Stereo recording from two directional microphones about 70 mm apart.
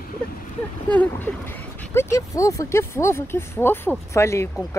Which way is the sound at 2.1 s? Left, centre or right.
Left.